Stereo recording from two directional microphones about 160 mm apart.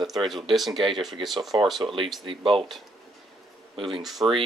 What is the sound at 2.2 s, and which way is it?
Speech, 30° right (ahead or behind).